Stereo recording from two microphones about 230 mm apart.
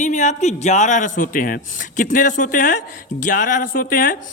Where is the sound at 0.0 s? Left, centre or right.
Left.